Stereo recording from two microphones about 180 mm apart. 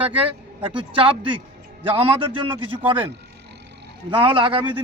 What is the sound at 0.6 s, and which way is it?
Speech, 30° right (ahead or behind).